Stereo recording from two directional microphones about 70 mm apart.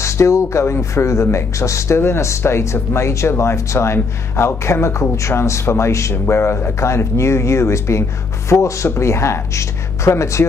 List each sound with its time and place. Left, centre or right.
0.0 s speech: left